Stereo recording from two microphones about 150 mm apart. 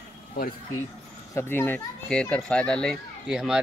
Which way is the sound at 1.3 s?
15° left (ahead or behind).